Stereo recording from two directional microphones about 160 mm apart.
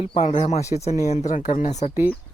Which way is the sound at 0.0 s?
40° left (ahead or behind).